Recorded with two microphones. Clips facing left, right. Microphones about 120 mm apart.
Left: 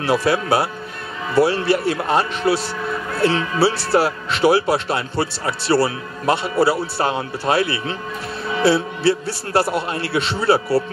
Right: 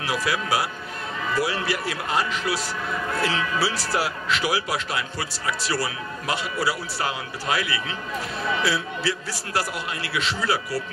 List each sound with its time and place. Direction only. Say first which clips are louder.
0.0 s speech: left 8 dB; 30° left (ahead or behind)